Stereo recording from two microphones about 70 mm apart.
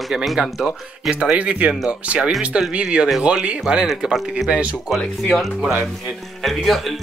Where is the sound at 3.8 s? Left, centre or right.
Centre.